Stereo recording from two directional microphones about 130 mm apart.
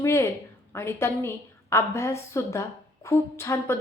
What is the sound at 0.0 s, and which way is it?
A woman's voice, 20° left (ahead or behind).